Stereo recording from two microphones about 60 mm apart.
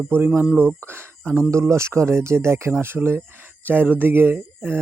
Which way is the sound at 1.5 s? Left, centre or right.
Right.